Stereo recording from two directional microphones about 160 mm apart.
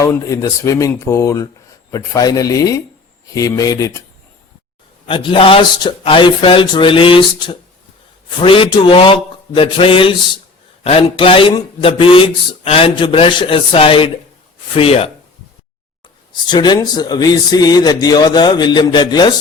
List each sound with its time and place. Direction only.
0.0 s speech: 20° left (ahead or behind)
5.0 s speech: 30° left (ahead or behind)
16.3 s speech: 25° left (ahead or behind)